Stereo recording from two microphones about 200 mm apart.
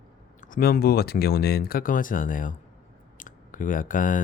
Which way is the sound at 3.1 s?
40° left (ahead or behind).